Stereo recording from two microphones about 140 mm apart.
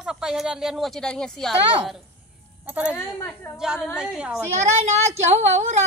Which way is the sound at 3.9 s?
5° right (ahead or behind).